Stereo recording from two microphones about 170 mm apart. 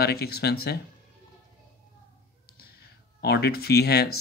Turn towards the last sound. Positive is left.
turn(degrees=70)  # may be behind; listen again after turning